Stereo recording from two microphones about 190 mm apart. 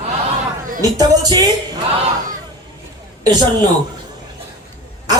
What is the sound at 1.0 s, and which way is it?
Speech, 20° right (ahead or behind).